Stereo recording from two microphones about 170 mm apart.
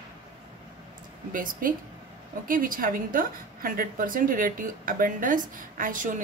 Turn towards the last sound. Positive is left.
turn(degrees=-50)  # may be behind; listen again after turning